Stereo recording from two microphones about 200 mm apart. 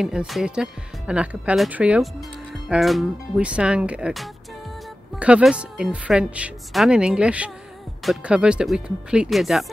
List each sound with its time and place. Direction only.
0.0 s speech: 5° right (ahead or behind)